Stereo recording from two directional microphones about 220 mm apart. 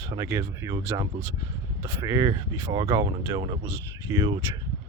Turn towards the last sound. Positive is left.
turn(degrees=-20)  # may be behind; listen again after turning